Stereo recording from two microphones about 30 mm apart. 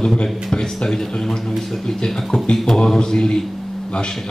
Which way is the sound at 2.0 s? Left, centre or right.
Centre.